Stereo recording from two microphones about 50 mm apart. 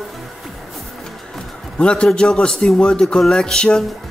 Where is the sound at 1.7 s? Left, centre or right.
Left.